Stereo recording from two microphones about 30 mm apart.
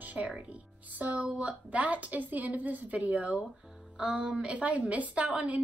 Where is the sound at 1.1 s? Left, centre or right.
Right.